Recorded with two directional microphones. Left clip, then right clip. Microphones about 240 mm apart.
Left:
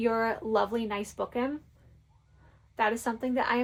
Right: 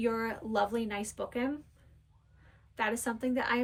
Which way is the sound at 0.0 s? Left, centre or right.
Centre.